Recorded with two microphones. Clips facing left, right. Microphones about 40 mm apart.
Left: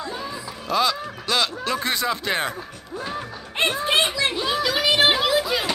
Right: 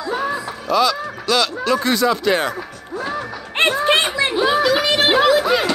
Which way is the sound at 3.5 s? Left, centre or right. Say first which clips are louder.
Right 5 dB; right.